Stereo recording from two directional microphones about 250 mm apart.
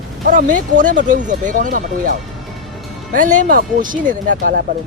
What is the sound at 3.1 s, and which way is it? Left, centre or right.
Speech, right.